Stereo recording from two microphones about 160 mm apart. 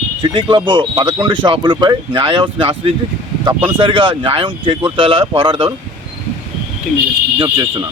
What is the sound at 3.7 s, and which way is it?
Speech, 30° right (ahead or behind).